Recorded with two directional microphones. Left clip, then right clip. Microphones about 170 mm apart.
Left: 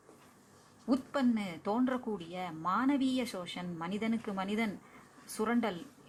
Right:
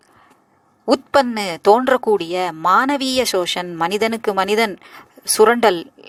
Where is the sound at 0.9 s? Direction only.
50° right (ahead or behind).